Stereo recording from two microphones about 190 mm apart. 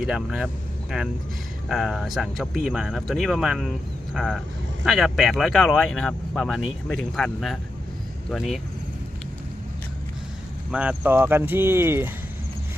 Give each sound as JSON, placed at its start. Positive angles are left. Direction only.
{"t": 0.0, "sound": "speech", "side_deg": 0}
{"t": 10.7, "sound": "speech", "side_deg": -5}